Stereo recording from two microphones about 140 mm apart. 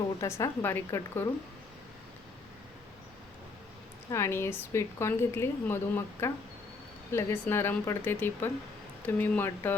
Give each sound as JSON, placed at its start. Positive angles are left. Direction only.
{"t": 0.2, "sound": "a woman's voice", "side_deg": 20}
{"t": 4.1, "sound": "a woman's voice", "side_deg": 20}